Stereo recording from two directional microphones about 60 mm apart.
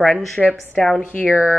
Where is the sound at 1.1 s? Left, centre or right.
Left.